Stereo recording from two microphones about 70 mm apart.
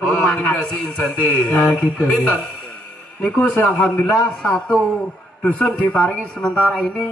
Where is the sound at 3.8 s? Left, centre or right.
Centre.